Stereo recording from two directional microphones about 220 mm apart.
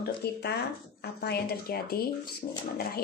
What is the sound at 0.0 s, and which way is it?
A woman's voice, 50° left (ahead or behind).